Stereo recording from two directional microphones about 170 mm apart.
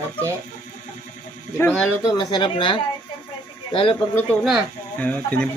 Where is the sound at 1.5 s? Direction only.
10° left (ahead or behind).